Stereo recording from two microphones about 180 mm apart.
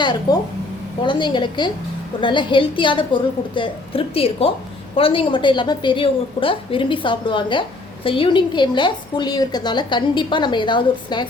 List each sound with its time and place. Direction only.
0.0 s a woman's voice: 25° left (ahead or behind)